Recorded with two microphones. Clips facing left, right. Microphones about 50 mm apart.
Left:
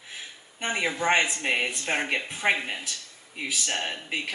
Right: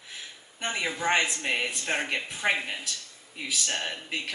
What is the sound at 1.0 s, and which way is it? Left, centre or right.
Speech, left.